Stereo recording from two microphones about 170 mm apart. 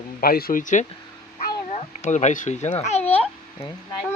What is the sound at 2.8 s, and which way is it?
Babbling, 40° left (ahead or behind).